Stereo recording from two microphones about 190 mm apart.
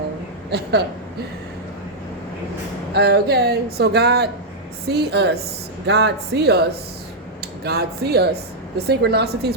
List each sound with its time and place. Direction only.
0.5 s speech: 60° right (ahead or behind)
2.9 s speech: 60° right (ahead or behind)